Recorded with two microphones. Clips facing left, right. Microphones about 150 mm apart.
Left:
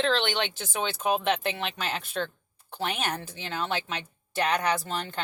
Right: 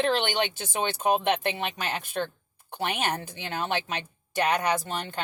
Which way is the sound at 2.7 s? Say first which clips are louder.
Right 2 dB; 15° right (ahead or behind).